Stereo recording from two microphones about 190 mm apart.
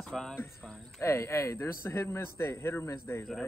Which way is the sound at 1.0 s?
15° left (ahead or behind).